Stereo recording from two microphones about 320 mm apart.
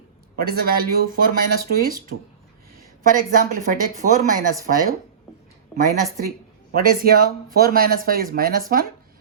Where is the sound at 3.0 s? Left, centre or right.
Right.